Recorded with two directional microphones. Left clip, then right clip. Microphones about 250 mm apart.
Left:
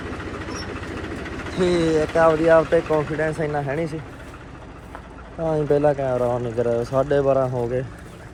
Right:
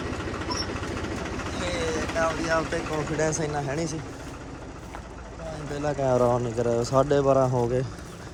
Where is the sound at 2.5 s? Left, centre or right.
Centre.